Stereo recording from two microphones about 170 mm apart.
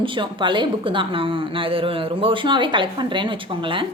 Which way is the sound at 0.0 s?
30° right (ahead or behind).